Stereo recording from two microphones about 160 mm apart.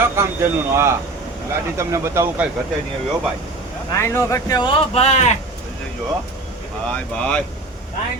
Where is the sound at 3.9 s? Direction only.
15° left (ahead or behind); by 5.3 s 45° left (ahead or behind).